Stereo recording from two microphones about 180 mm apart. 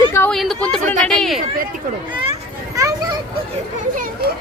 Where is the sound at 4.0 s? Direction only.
60° right (ahead or behind).